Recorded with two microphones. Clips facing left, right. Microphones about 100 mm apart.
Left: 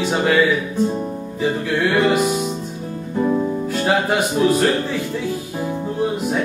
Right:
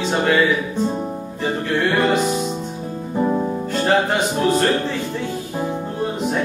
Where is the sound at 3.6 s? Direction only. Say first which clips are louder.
Right 1 dB; 5° left (ahead or behind).